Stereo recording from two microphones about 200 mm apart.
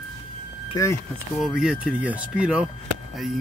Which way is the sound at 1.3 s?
Centre (ahead or behind).